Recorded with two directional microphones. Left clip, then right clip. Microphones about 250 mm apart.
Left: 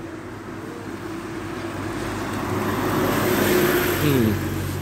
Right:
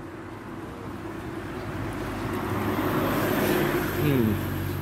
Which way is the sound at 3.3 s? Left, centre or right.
Left.